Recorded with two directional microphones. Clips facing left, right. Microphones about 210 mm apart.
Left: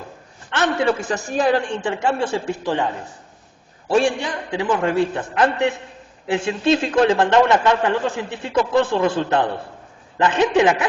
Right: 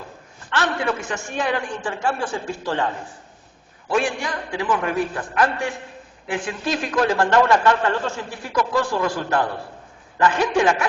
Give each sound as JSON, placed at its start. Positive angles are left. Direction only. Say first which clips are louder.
{"t": 0.5, "sound": "a woman's voice", "louder": "left 4 dB", "side_deg": 20}
{"t": 1.8, "sound": "speech", "louder": "left 4 dB", "side_deg": 20}
{"t": 3.8, "sound": "speech", "louder": "left 4 dB", "side_deg": 30}